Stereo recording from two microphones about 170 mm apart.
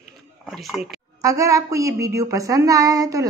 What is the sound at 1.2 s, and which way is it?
Speech, 20° right (ahead or behind).